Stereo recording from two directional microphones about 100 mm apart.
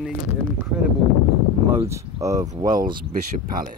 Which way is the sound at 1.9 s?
35° right (ahead or behind).